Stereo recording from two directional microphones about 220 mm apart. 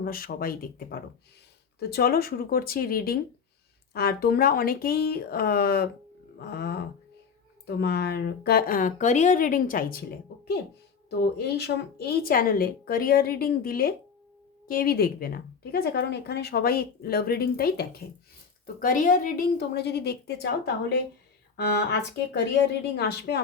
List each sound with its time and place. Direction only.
0.0 s speech: 40° left (ahead or behind)
21.5 s speech: 45° left (ahead or behind)